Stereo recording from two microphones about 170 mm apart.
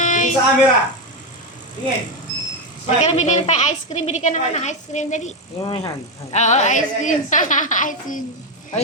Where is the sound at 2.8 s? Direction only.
45° left (ahead or behind).